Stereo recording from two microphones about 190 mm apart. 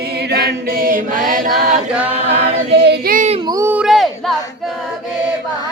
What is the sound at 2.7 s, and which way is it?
Child singing, 60° right (ahead or behind).